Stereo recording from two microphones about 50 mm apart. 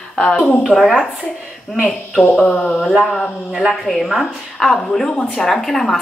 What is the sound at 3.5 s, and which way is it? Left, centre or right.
Speech, centre.